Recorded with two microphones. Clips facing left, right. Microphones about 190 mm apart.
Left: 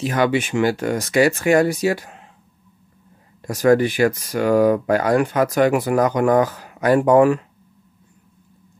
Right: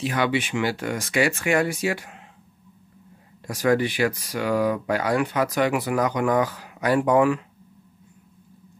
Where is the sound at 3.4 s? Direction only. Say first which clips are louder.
Left 6 dB; 45° left (ahead or behind).